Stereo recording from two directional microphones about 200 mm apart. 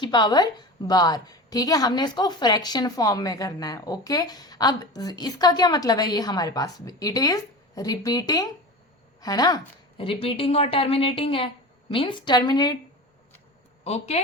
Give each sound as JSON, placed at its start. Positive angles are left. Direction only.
{"t": 0.0, "sound": "a woman's voice", "side_deg": 20}
{"t": 13.8, "sound": "a woman's voice", "side_deg": 30}